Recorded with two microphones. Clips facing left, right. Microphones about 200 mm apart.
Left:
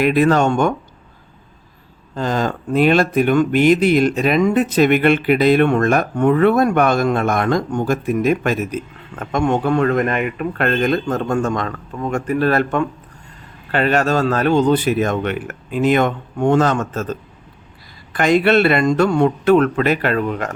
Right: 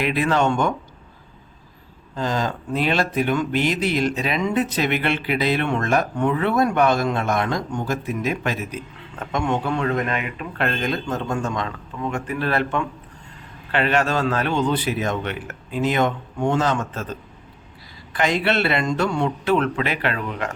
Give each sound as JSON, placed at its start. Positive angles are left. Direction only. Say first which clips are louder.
{"t": 0.0, "sound": "speech", "louder": "left 6 dB", "side_deg": 45}
{"t": 2.1, "sound": "speech", "louder": "left 4 dB", "side_deg": 55}
{"t": 18.1, "sound": "speech", "louder": "left 7 dB", "side_deg": 50}